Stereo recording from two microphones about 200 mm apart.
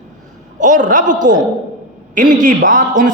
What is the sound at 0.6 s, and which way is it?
A man's voice, 40° right (ahead or behind).